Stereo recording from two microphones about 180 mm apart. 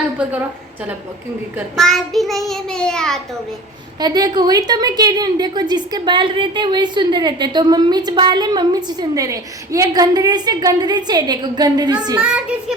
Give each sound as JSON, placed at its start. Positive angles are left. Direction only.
{"t": 1.7, "sound": "child singing", "side_deg": 0}
{"t": 4.0, "sound": "a woman's voice", "side_deg": -20}
{"t": 12.2, "sound": "child singing", "side_deg": -5}